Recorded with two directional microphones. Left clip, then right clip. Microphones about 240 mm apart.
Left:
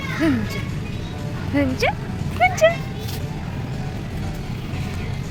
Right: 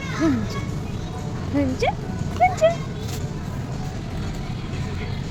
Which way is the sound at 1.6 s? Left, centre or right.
Centre.